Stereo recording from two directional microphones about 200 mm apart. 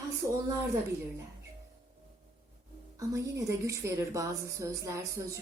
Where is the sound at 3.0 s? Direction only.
15° right (ahead or behind).